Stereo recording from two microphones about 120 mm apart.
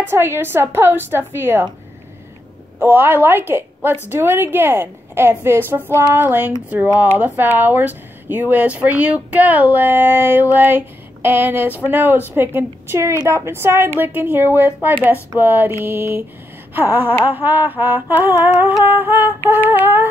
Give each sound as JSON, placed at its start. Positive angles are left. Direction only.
{"t": 0.0, "sound": "speech", "side_deg": -20}
{"t": 2.8, "sound": "speech", "side_deg": -20}